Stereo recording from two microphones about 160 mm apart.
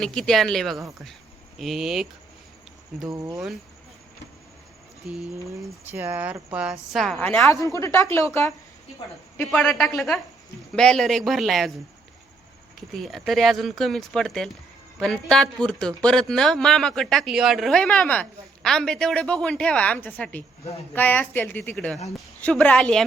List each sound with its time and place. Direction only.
0.0 s speech: 5° left (ahead or behind)
3.1 s speech: 20° right (ahead or behind)
5.0 s speech: 5° right (ahead or behind)
7.4 s a woman's voice: 20° left (ahead or behind)
9.4 s speech: 5° left (ahead or behind)
13.0 s a woman's voice: centre (ahead or behind)